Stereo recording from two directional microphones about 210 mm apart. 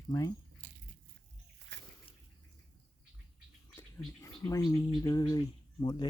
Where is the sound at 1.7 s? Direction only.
60° right (ahead or behind).